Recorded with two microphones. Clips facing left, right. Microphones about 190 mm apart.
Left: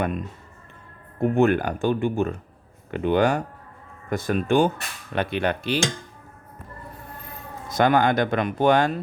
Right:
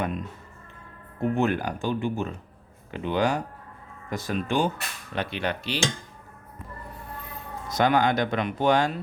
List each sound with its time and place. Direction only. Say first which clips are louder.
1.2 s speech: left 5 dB; 55° left (ahead or behind)
7.7 s speech: left 3 dB; 50° left (ahead or behind)